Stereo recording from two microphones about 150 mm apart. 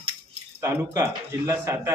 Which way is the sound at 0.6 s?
15° right (ahead or behind).